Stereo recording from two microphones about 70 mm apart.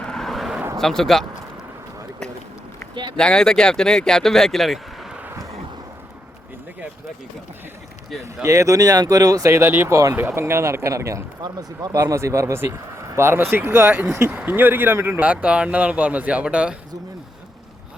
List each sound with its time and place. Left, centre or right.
0.0 s vehicle: centre
0.8 s speech: centre
3.2 s speech: centre
8.4 s speech: right
11.4 s speech: right
12.1 s speech: right
14.3 s speech: right
15.2 s speech: right